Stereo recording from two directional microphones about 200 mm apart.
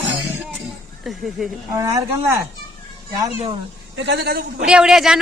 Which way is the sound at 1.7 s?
15° right (ahead or behind).